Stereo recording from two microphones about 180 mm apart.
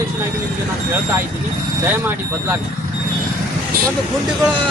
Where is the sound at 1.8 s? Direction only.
10° right (ahead or behind).